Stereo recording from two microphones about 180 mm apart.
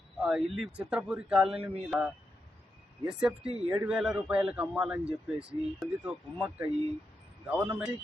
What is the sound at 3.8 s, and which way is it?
A man's voice, 5° right (ahead or behind).